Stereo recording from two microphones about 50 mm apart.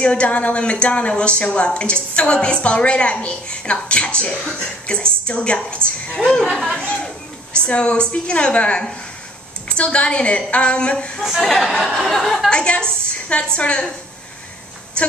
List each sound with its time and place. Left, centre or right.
0.0 s a woman's voice: left
6.1 s a sound: centre
7.5 s a woman's voice: left
11.2 s speech: centre
11.9 s a sound: centre
12.4 s a woman's voice: centre